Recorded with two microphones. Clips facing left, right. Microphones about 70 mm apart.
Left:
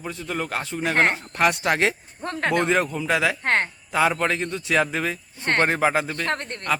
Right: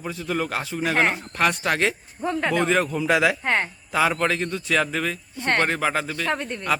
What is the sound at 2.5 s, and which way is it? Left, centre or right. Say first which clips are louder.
Speech: left 2 dB; centre.